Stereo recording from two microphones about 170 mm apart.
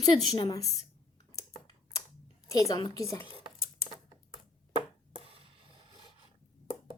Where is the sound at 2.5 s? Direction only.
20° left (ahead or behind).